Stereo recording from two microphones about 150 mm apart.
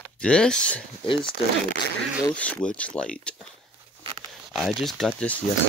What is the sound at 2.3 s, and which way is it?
Speech, 10° left (ahead or behind).